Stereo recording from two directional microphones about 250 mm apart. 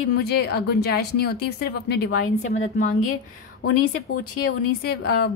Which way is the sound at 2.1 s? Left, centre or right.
Left.